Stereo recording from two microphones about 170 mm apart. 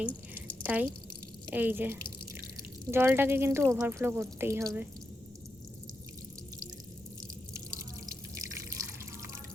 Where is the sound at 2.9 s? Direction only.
15° right (ahead or behind).